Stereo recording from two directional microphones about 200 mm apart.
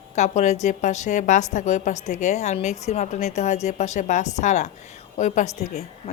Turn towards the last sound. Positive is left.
turn(degrees=35)  # may be behind; listen again after turning